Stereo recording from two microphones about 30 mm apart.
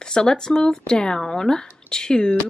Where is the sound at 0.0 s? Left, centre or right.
Left.